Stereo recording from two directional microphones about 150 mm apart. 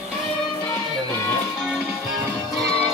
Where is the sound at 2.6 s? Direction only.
40° left (ahead or behind).